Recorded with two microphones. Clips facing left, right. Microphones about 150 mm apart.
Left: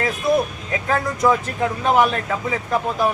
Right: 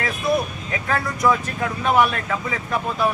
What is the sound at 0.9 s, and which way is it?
Speech, 20° left (ahead or behind).